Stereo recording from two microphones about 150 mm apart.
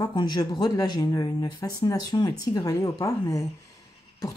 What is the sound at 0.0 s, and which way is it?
Speech, 30° left (ahead or behind).